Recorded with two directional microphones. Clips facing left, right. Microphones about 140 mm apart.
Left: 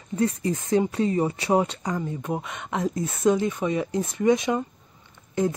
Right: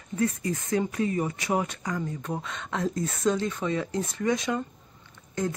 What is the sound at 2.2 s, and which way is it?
A woman's voice, 20° left (ahead or behind).